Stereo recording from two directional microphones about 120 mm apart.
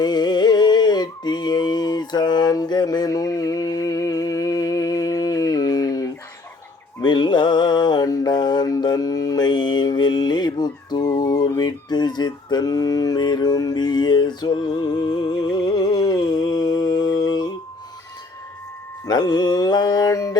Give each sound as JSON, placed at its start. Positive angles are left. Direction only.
{"t": 0.0, "sound": "music", "side_deg": 35}
{"t": 7.0, "sound": "mantra", "side_deg": 40}
{"t": 19.0, "sound": "mantra", "side_deg": 35}